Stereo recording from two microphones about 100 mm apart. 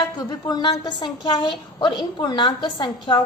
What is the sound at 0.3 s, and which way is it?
A woman's voice, 40° left (ahead or behind).